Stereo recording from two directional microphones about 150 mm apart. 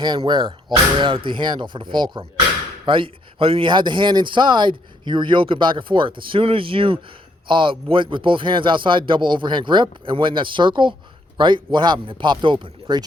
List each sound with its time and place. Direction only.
0.0 s speech: 30° right (ahead or behind)